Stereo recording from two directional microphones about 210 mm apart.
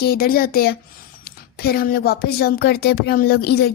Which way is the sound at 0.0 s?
45° left (ahead or behind).